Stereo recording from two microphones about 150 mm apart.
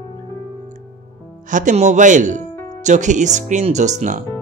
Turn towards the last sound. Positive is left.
turn(degrees=-55)  # may be behind; listen again after turning